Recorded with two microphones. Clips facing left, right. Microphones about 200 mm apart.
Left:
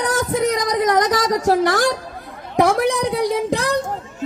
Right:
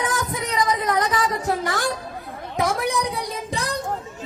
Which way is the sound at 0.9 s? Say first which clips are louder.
Left 5 dB; 40° left (ahead or behind).